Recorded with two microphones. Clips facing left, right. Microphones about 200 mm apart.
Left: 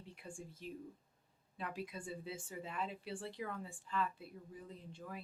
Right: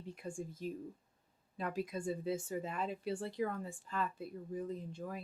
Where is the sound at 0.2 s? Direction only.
40° right (ahead or behind).